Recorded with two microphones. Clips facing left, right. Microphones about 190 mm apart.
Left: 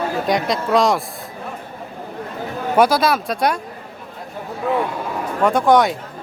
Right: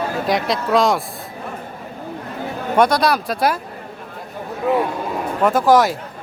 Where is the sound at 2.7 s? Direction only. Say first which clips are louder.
Even; 5° left (ahead or behind).